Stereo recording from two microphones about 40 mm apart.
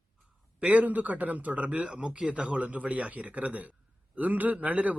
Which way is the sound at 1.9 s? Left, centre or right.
Right.